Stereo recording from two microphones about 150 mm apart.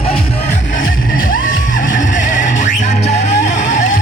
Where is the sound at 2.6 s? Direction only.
50° left (ahead or behind).